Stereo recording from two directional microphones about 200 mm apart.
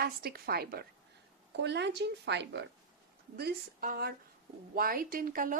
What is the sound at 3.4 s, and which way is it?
Speech, 50° right (ahead or behind).